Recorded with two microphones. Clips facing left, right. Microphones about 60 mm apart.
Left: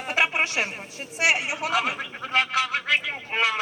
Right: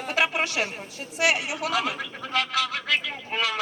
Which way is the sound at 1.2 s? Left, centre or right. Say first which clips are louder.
Left 1 dB; left.